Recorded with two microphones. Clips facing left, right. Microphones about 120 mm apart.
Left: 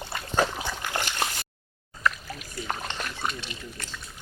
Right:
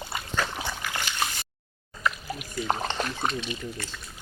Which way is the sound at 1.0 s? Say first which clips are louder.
Left 2 dB; 55° left (ahead or behind).